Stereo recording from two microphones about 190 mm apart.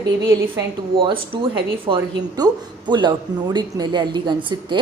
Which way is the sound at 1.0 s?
30° right (ahead or behind).